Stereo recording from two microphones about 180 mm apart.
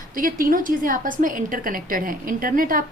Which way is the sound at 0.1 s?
50° right (ahead or behind).